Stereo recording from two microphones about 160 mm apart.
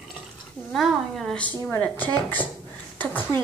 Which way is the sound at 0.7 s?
Centre (ahead or behind).